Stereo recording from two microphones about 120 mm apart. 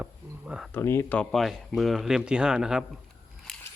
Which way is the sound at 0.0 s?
10° right (ahead or behind).